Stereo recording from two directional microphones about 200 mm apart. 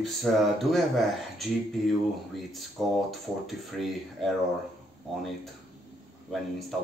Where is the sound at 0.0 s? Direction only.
Centre (ahead or behind).